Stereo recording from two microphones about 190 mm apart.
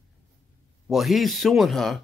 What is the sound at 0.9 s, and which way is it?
Speech, centre (ahead or behind).